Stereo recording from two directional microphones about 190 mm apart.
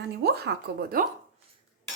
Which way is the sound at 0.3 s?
55° right (ahead or behind).